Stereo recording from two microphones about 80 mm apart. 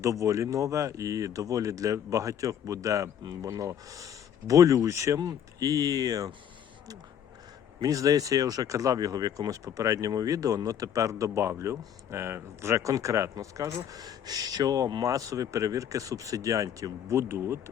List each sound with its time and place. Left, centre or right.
0.0 s speech: right
7.8 s speech: right